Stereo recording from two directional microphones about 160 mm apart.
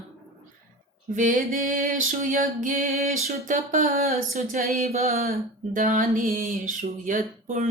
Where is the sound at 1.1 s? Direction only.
55° right (ahead or behind).